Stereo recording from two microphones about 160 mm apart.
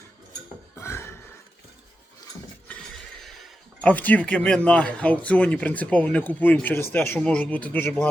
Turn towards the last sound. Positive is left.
turn(degrees=10)  # may be behind; listen again after turning